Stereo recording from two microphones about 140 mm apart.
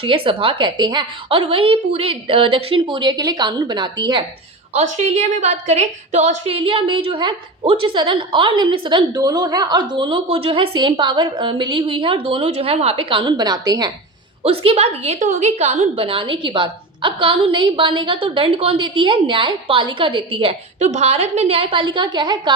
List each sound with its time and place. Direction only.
0.0 s a woman's voice: 40° right (ahead or behind)
4.7 s a woman's voice: 55° right (ahead or behind); by 13.9 s 30° right (ahead or behind)
14.4 s a woman's voice: 45° right (ahead or behind)